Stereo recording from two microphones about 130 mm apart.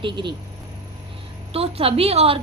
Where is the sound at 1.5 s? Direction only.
50° right (ahead or behind).